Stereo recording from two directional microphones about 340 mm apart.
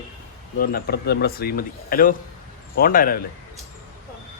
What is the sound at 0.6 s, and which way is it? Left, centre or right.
Speech, left.